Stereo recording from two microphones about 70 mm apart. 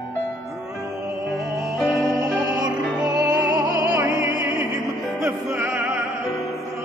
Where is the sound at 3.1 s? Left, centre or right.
Right.